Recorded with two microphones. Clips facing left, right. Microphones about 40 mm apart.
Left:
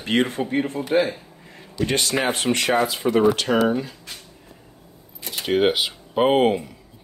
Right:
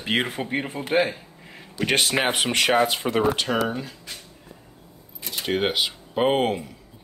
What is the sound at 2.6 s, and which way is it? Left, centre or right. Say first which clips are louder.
Speech: right 1 dB; right.